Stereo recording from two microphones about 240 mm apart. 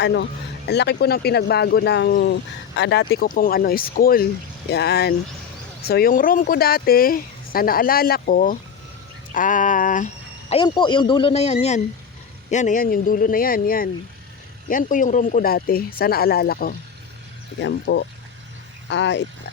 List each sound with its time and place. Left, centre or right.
0.0 s speech: left
10.5 s speech: centre; by 19.2 s left